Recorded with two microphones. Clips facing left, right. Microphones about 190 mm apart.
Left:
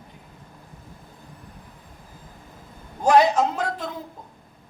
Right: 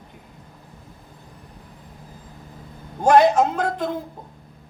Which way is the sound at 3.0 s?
50° right (ahead or behind).